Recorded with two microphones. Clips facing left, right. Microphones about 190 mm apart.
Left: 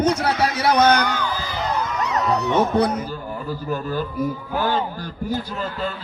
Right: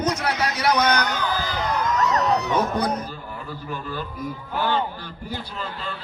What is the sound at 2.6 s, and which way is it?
Speech, 30° left (ahead or behind).